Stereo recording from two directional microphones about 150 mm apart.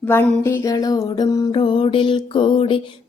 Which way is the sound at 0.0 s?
15° left (ahead or behind).